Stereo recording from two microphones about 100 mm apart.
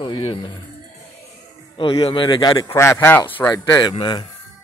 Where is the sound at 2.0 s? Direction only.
55° left (ahead or behind).